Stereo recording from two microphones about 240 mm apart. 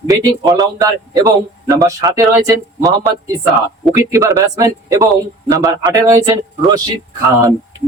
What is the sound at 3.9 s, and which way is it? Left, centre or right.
A man's voice, centre.